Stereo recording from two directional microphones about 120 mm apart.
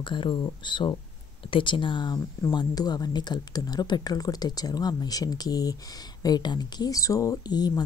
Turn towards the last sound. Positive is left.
turn(degrees=35)  # may be behind; listen again after turning